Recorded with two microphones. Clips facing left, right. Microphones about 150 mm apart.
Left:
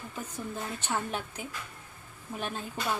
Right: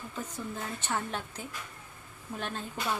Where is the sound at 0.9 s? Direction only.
10° left (ahead or behind).